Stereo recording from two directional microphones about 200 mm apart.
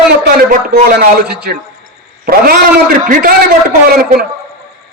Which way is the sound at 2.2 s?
45° right (ahead or behind).